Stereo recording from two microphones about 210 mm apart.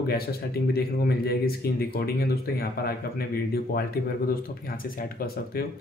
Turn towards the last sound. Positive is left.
turn(degrees=45)  # may be behind; listen again after turning